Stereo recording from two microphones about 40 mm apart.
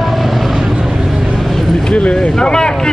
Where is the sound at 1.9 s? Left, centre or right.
Left.